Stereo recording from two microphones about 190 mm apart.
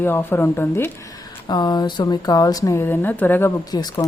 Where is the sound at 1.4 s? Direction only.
20° left (ahead or behind).